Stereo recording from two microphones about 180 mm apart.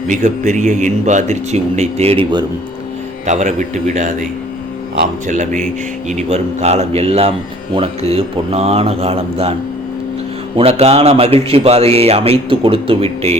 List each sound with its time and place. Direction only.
0.1 s a man's voice: 45° right (ahead or behind)
5.3 s a man's voice: 45° right (ahead or behind)
10.6 s a man's voice: 35° right (ahead or behind)